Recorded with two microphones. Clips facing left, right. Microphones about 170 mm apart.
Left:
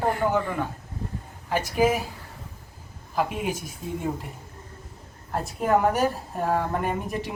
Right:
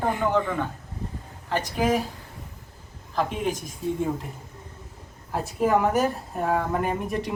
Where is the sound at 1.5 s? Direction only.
10° left (ahead or behind).